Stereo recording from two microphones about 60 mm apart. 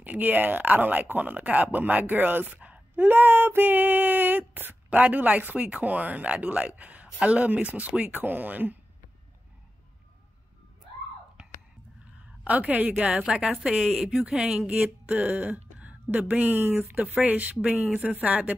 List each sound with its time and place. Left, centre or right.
0.0 s speech: right
12.0 s a sound: right
13.1 s a woman's voice: centre; by 18.6 s right